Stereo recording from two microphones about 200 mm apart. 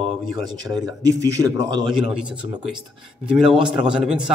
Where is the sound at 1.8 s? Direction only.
5° right (ahead or behind).